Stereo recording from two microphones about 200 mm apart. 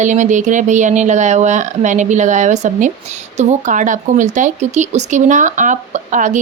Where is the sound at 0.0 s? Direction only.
40° right (ahead or behind).